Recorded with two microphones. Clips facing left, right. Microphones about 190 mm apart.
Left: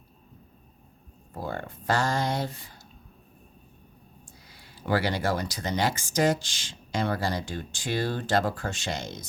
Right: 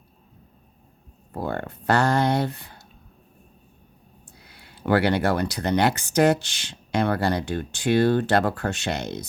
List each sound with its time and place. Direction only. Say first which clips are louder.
1.3 s speech: right 5 dB; 60° right (ahead or behind)
4.3 s speech: right 2 dB; 60° right (ahead or behind)